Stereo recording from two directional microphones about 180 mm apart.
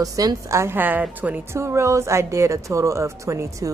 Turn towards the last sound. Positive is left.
turn(degrees=-15)  # may be behind; listen again after turning